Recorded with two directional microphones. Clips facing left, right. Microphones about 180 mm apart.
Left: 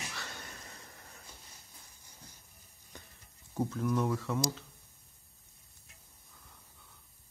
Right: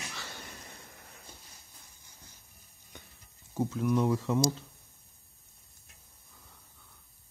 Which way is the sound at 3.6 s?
15° right (ahead or behind).